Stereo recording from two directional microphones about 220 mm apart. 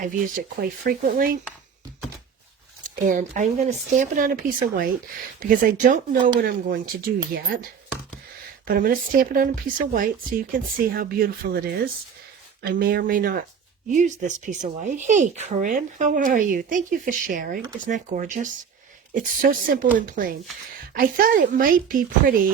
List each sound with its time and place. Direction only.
0.0 s speech: 40° right (ahead or behind)
2.8 s speech: 35° right (ahead or behind)
12.6 s speech: 45° right (ahead or behind)